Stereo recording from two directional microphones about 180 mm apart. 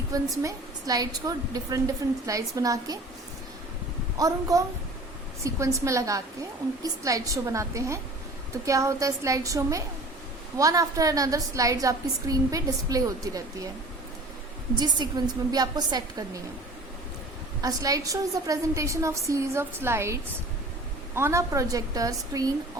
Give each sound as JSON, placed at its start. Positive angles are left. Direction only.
{"t": 0.1, "sound": "a woman's voice", "side_deg": -20}
{"t": 4.2, "sound": "a woman's voice", "side_deg": -20}
{"t": 14.8, "sound": "a woman's voice", "side_deg": -25}
{"t": 17.6, "sound": "a woman's voice", "side_deg": -20}
{"t": 21.2, "sound": "a woman's voice", "side_deg": -15}